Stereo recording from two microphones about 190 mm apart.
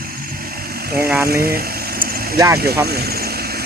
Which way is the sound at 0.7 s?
55° right (ahead or behind).